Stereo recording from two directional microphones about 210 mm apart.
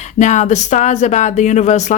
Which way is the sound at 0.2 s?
35° left (ahead or behind).